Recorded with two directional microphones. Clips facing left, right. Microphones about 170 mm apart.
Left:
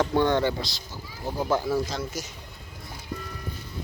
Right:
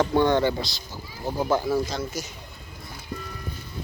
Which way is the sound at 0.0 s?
25° right (ahead or behind).